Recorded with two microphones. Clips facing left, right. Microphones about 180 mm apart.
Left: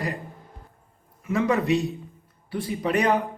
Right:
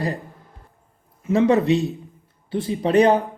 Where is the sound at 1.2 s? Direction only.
25° right (ahead or behind).